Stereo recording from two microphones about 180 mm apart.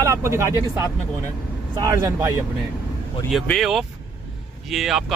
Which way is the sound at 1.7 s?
20° right (ahead or behind).